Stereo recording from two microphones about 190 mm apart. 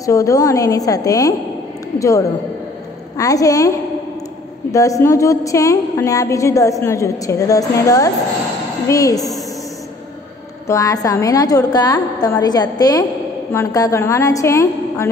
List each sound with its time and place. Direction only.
0.0 s a woman's voice: 15° left (ahead or behind)
4.7 s a woman's voice: 15° left (ahead or behind)
10.7 s a woman's voice: 15° left (ahead or behind)